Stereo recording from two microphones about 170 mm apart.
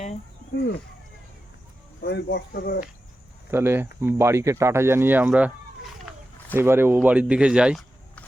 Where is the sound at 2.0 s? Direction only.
85° left; by 2.8 s 70° left (ahead or behind).